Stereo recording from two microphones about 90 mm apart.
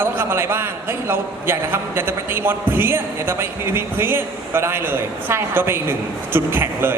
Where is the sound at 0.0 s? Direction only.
25° right (ahead or behind).